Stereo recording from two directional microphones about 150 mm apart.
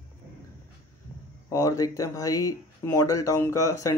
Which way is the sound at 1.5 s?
20° left (ahead or behind).